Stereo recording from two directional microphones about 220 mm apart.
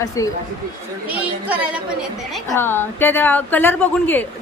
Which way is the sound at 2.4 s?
10° left (ahead or behind).